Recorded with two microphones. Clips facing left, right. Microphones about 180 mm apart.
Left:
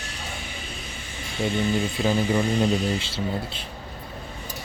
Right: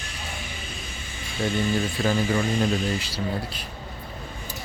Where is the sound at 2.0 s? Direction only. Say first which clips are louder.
Left 2 dB; 15° left (ahead or behind).